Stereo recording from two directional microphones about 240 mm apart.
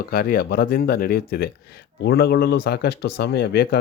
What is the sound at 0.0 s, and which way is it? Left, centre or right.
Speech, left.